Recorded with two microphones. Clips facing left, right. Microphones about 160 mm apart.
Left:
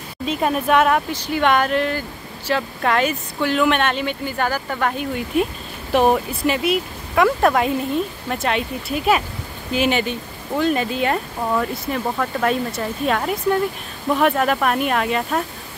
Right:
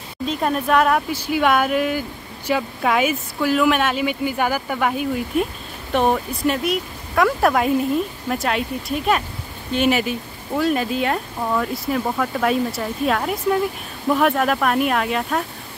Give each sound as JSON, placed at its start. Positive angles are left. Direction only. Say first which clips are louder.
{"t": 0.3, "sound": "speech", "louder": "left 1 dB", "side_deg": 5}
{"t": 1.1, "sound": "speech", "louder": "even", "side_deg": -10}